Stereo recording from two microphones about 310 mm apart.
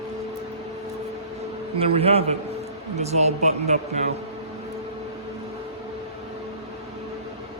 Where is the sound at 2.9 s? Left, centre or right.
Right.